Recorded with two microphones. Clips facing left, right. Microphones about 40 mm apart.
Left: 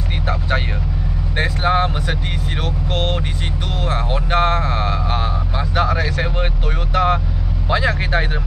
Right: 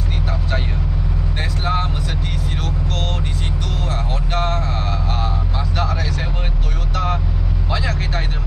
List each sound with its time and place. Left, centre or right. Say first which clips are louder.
1.4 s speech: left 6 dB; left
3.9 s speech: left 7 dB; left
6.9 s vehicle: left 6 dB; left
7.7 s speech: left 6 dB; left